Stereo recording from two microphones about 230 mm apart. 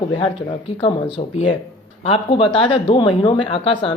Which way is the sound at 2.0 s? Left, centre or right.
Left.